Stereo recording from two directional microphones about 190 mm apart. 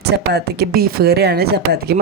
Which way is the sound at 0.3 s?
60° right (ahead or behind).